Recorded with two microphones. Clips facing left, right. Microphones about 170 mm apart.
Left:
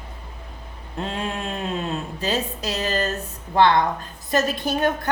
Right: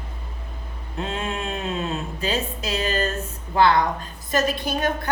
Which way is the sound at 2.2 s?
40° left (ahead or behind).